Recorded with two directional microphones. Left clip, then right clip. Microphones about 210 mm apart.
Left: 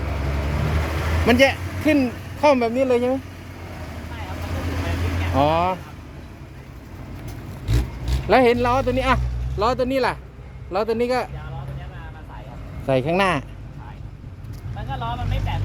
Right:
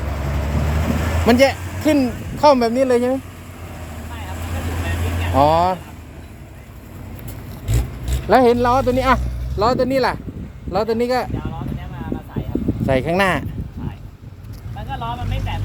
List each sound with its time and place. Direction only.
0.0 s vehicle: 30° left (ahead or behind)
1.3 s speech: 15° right (ahead or behind)
1.5 s a sound: 35° left (ahead or behind)
1.8 s speech: 15° right (ahead or behind)
2.0 s a sound: 35° left (ahead or behind)
2.4 s speech: 15° right (ahead or behind)
3.7 s vehicle: 40° left (ahead or behind)
5.3 s speech: 15° right (ahead or behind)
7.7 s vehicle: 40° left (ahead or behind)
8.3 s speech: 15° right (ahead or behind)
12.8 s speech: 5° left (ahead or behind)
14.8 s vehicle: 15° right (ahead or behind)